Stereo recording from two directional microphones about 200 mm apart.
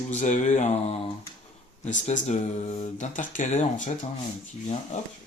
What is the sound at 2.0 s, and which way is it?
Speech, 35° left (ahead or behind).